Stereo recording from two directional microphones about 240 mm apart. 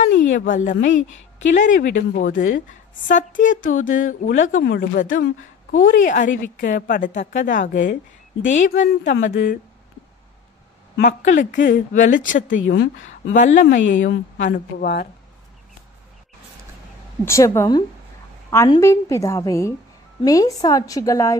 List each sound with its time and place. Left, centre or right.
0.1 s a woman's voice: left
11.1 s speech: left
12.6 s speech: left
17.2 s a woman's voice: centre